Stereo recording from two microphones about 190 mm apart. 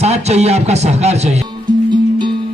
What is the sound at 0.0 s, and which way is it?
Speech, 35° right (ahead or behind).